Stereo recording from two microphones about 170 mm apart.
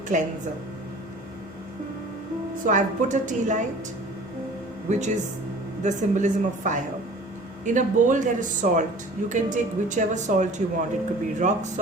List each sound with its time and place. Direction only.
0.1 s speech: 50° right (ahead or behind)
2.6 s speech: 45° right (ahead or behind)
4.9 s speech: 45° right (ahead or behind)